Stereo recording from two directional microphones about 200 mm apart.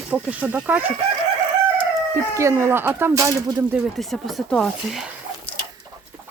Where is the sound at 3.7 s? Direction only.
Centre (ahead or behind).